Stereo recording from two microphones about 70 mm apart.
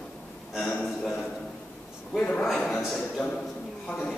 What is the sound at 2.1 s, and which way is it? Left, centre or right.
Speech, centre.